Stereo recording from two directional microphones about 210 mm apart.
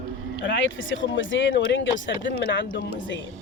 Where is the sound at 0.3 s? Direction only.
60° left (ahead or behind).